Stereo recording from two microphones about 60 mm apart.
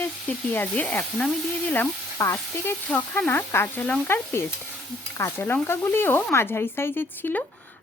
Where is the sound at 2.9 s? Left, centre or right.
Left.